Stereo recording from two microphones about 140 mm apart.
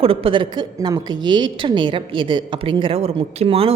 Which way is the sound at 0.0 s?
40° right (ahead or behind).